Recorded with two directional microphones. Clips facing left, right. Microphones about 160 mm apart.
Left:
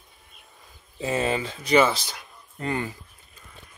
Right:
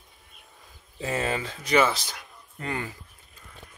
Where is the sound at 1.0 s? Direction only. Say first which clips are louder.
Left 3 dB; 25° left (ahead or behind).